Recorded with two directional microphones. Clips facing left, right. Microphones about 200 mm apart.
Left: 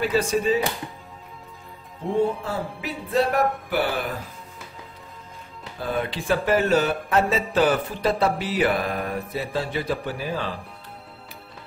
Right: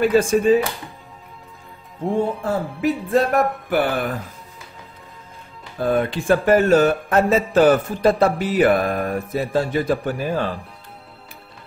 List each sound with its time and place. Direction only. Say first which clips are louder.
0.0 s speech: right 6 dB; 50° right (ahead or behind)
2.4 s speech: right 9 dB; 50° right (ahead or behind)
5.8 s speech: right 7 dB; 50° right (ahead or behind)